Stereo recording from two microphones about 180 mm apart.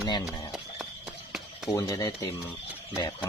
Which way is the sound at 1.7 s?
20° left (ahead or behind).